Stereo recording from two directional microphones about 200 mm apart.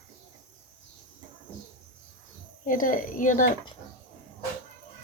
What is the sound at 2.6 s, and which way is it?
Speech, 40° left (ahead or behind).